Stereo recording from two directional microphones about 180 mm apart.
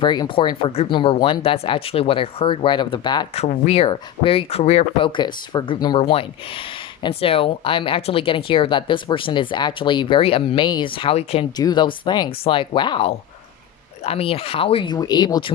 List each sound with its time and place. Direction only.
0.0 s speech: 25° left (ahead or behind)
3.4 s speech: 35° left (ahead or behind)
11.5 s speech: 25° left (ahead or behind)